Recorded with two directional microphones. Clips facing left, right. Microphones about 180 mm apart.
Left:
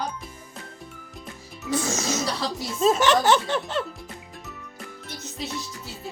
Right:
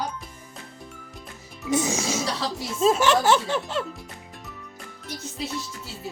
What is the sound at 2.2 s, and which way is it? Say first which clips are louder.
Speech: left 1 dB; centre (ahead or behind).